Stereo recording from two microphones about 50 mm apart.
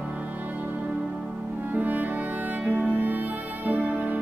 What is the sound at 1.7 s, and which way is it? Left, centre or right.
Music, right.